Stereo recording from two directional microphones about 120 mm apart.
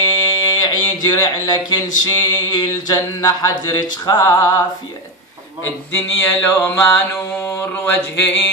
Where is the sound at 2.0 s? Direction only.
30° left (ahead or behind).